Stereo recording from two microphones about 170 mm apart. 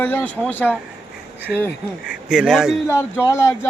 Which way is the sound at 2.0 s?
5° right (ahead or behind).